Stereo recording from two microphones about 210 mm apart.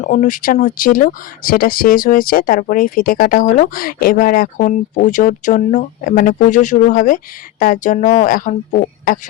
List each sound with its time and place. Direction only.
0.0 s speech: 40° left (ahead or behind)